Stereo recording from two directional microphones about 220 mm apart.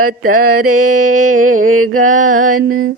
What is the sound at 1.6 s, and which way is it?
Mantra, 75° right (ahead or behind).